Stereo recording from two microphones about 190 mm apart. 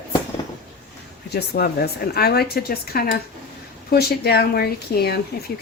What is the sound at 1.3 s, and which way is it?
Speech, 55° left (ahead or behind).